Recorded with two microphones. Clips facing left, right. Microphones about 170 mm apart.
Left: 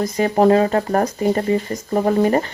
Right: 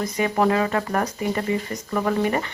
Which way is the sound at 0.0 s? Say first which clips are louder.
Left 6 dB; 35° left (ahead or behind).